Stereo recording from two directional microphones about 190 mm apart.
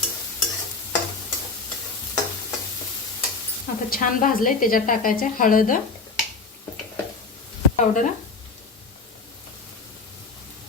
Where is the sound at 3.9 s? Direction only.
45° left (ahead or behind).